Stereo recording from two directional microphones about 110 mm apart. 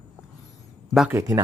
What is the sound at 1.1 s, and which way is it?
Speech, 30° right (ahead or behind).